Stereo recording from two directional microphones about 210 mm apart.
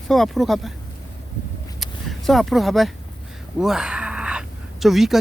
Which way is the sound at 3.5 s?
5° right (ahead or behind).